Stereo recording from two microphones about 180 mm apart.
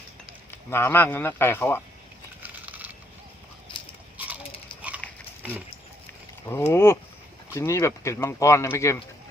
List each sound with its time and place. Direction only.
0.5 s speech: 15° left (ahead or behind)
2.4 s a sound: 10° right (ahead or behind)
5.0 s dog: 10° left (ahead or behind)
5.4 s speech: 5° right (ahead or behind)
6.4 s speech: 15° left (ahead or behind)